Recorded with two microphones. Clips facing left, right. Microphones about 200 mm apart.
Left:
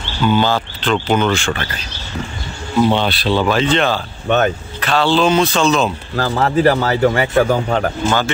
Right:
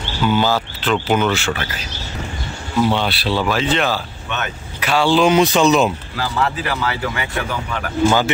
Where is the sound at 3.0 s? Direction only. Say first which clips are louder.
Left 3 dB; 5° right (ahead or behind).